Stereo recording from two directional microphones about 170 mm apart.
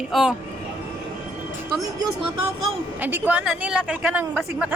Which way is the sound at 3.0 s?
10° right (ahead or behind).